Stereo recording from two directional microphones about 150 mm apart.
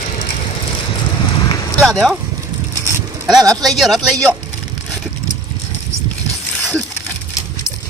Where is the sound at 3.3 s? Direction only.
25° right (ahead or behind).